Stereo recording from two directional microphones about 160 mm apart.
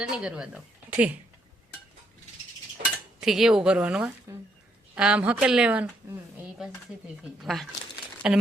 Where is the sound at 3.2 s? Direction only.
5° right (ahead or behind).